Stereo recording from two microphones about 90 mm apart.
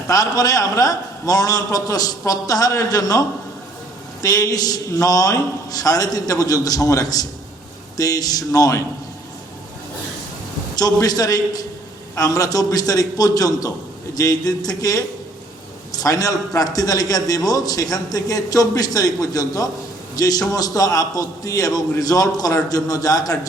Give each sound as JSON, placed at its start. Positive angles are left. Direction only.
{"t": 0.1, "sound": "a man's voice", "side_deg": 40}
{"t": 10.8, "sound": "a man's voice", "side_deg": 45}